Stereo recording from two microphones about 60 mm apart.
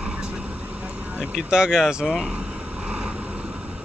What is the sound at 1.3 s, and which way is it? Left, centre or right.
Speech, centre.